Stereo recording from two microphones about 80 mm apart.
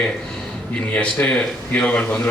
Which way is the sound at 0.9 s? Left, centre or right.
Centre.